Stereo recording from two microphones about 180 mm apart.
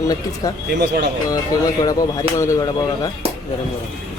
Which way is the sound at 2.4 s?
15° left (ahead or behind).